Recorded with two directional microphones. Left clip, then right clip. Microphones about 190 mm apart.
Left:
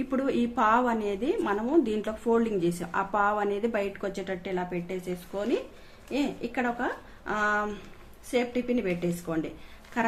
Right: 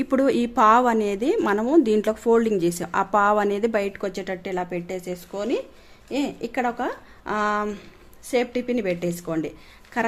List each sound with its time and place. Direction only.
0.1 s a woman's voice: 60° right (ahead or behind)